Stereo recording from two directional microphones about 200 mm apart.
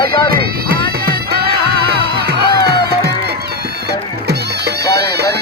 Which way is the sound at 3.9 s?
55° right (ahead or behind).